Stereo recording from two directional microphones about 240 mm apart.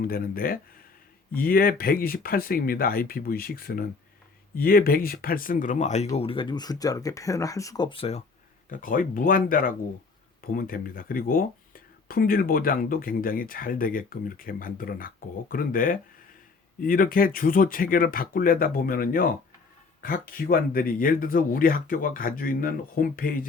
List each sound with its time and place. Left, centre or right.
0.0 s speech: left
8.7 s speech: left